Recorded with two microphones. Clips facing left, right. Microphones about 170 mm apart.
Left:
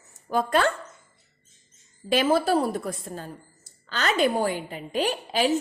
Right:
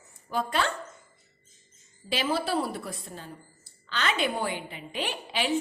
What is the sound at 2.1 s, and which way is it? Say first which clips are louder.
A woman's voice: left 7 dB; 50° left (ahead or behind).